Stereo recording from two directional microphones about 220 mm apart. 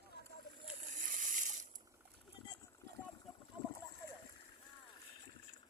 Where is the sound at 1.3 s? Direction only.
35° right (ahead or behind).